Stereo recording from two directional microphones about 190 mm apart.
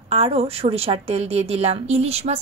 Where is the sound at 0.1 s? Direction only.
30° right (ahead or behind).